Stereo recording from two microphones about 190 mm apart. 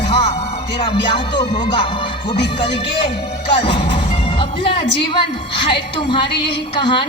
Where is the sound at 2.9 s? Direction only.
25° left (ahead or behind).